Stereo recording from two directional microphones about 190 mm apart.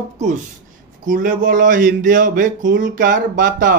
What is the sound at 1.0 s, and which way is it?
Speech, 45° right (ahead or behind).